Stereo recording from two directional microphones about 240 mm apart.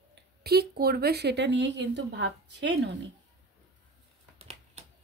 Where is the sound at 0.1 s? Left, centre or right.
Right.